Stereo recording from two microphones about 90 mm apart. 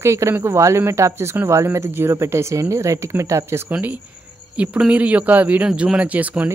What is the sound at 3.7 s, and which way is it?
A man's voice, 20° right (ahead or behind).